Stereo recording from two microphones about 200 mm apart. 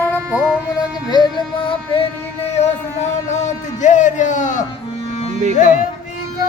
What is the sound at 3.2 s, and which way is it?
Speech, 35° left (ahead or behind).